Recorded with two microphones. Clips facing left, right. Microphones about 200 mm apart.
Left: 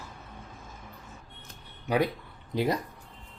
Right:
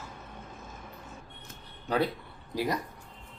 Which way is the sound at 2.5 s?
20° left (ahead or behind).